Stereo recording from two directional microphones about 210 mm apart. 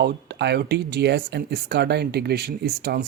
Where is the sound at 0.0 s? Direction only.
55° right (ahead or behind).